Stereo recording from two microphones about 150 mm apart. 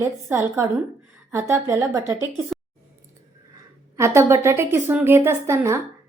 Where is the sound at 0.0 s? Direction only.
20° right (ahead or behind).